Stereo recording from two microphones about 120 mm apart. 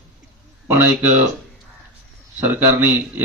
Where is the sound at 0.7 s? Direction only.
15° right (ahead or behind).